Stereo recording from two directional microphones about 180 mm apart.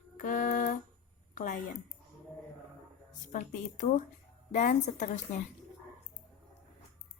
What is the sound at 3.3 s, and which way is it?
A woman's voice, 45° left (ahead or behind).